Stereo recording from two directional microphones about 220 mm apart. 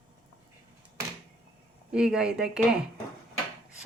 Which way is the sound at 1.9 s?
5° right (ahead or behind).